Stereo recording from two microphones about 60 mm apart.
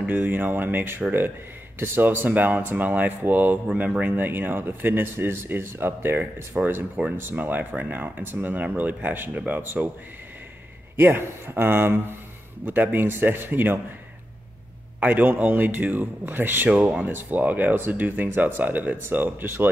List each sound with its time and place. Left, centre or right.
0.0 s speech: right
11.0 s speech: right
15.0 s speech: right